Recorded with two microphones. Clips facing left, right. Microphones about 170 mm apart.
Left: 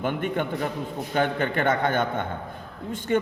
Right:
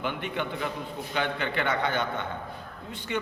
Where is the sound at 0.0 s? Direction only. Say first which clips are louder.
Left 5 dB; 45° left (ahead or behind).